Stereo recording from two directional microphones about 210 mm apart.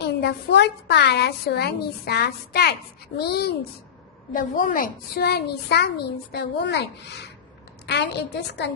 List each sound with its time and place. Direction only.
0.0 s a child's voice: 50° left (ahead or behind)